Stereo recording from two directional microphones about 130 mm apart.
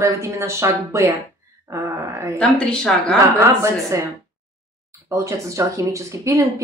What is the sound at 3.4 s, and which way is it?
Speech, 20° right (ahead or behind).